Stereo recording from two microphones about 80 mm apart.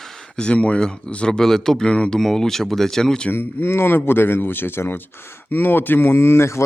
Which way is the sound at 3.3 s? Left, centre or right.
Left.